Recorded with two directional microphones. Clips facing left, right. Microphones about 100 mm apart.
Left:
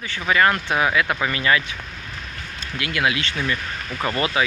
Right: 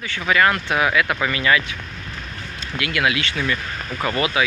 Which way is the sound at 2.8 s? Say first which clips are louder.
Right 1 dB; 25° left (ahead or behind).